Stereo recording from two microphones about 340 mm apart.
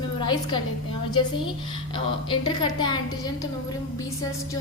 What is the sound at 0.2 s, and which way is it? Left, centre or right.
Speech, centre.